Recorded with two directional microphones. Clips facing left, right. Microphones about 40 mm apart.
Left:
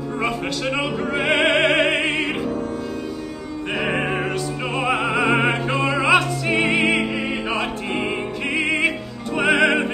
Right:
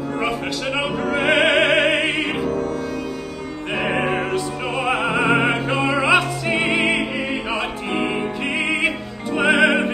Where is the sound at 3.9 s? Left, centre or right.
Right.